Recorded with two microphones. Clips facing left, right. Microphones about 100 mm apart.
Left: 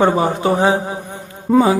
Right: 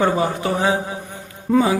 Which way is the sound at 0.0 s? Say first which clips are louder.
Left 4 dB; 30° left (ahead or behind).